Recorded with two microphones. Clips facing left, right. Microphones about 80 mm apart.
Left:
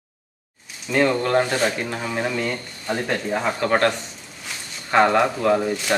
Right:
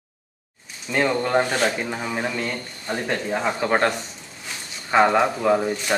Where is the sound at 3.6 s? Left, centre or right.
Centre.